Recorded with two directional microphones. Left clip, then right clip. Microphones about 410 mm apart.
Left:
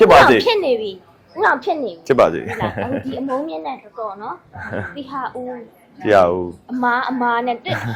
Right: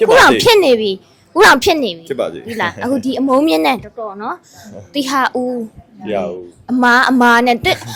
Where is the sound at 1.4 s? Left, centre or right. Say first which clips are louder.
Right 8 dB; right.